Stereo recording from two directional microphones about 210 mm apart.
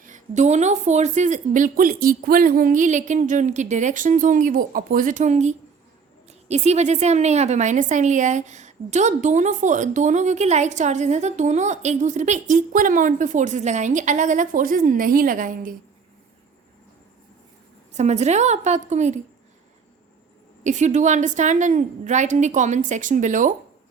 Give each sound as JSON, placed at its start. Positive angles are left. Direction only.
{"t": 0.0, "sound": "a woman's voice", "side_deg": -35}
{"t": 17.9, "sound": "a woman's voice", "side_deg": -35}
{"t": 20.7, "sound": "a woman's voice", "side_deg": -35}